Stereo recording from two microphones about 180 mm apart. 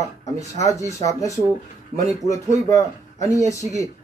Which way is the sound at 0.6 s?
15° left (ahead or behind).